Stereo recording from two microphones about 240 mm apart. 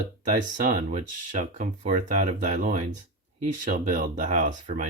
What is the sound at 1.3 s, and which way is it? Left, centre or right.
Speech, right.